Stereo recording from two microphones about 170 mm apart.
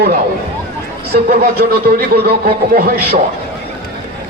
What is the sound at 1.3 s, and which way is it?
A man's voice, 65° right (ahead or behind).